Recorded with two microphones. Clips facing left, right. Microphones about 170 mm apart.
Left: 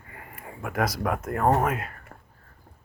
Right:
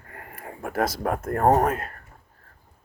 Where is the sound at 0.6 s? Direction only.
30° right (ahead or behind).